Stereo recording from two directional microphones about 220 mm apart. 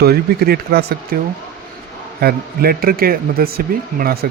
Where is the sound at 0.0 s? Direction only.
45° right (ahead or behind).